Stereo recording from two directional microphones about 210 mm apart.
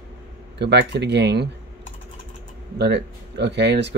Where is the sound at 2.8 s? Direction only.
55° right (ahead or behind).